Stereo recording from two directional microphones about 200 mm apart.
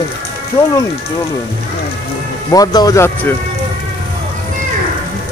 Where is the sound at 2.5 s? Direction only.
20° left (ahead or behind).